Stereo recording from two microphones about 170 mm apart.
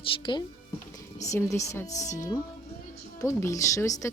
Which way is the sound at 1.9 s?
45° left (ahead or behind).